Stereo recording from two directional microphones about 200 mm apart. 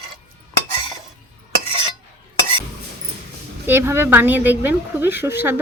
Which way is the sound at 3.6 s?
10° right (ahead or behind).